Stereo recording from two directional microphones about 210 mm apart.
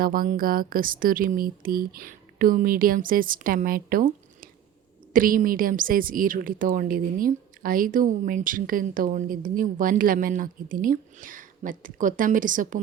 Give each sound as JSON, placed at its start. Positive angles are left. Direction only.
{"t": 0.0, "sound": "a woman's voice", "side_deg": -40}